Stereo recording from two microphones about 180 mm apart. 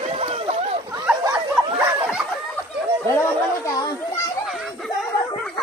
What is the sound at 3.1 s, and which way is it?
Children playing, 15° left (ahead or behind).